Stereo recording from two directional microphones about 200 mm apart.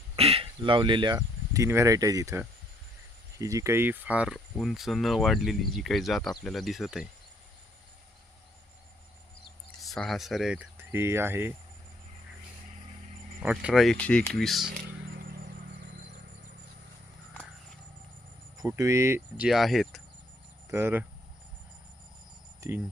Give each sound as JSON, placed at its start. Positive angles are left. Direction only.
{"t": 0.2, "sound": "speech", "side_deg": -30}
{"t": 9.8, "sound": "speech", "side_deg": 0}
{"t": 13.4, "sound": "speech", "side_deg": -5}
{"t": 18.6, "sound": "speech", "side_deg": -15}
{"t": 20.7, "sound": "speech", "side_deg": -10}